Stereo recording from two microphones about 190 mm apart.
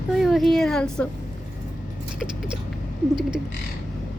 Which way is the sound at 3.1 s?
5° right (ahead or behind).